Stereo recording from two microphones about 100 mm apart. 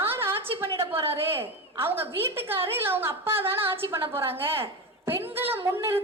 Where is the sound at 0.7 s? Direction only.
25° right (ahead or behind).